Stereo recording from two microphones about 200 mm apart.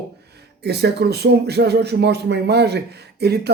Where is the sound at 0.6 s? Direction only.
55° right (ahead or behind).